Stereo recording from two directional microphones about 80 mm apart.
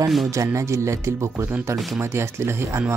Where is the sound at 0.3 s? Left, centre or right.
Right.